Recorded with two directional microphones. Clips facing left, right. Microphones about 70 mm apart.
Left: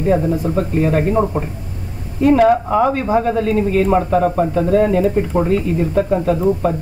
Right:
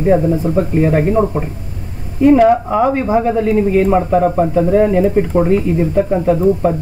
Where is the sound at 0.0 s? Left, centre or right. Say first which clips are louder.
Right 3 dB; right.